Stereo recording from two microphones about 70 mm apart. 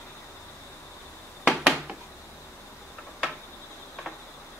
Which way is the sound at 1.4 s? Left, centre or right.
Centre.